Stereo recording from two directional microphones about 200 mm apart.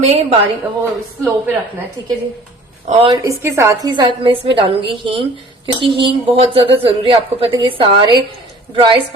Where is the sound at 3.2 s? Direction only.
15° right (ahead or behind).